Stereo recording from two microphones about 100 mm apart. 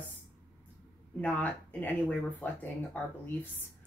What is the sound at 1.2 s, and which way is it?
Speech, 15° left (ahead or behind).